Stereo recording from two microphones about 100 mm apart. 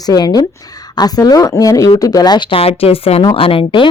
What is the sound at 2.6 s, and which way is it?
A woman's voice, 75° left (ahead or behind).